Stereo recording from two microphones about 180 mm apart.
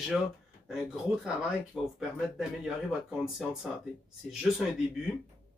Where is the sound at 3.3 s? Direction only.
Centre (ahead or behind).